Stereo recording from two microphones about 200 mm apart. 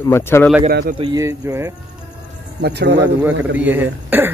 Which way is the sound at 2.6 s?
55° right (ahead or behind).